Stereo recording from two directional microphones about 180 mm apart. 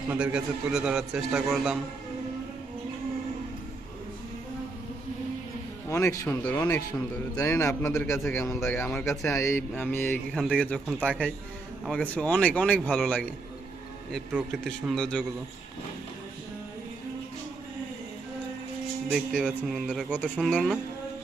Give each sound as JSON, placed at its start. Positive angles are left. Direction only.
{"t": 0.1, "sound": "a man's voice", "side_deg": -5}
{"t": 5.9, "sound": "a man's voice", "side_deg": 15}
{"t": 19.1, "sound": "a man's voice", "side_deg": 5}